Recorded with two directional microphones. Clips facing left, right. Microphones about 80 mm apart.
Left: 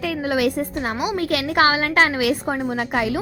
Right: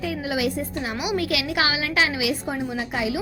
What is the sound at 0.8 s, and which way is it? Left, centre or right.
A woman's voice, left.